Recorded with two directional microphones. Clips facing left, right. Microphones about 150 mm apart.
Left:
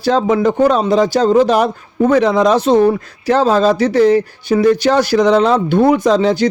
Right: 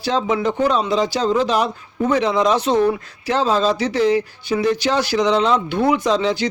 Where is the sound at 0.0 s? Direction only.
45° left (ahead or behind).